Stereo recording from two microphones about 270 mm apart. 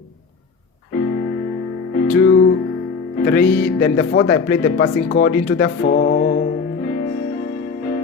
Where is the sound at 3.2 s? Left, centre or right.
Centre.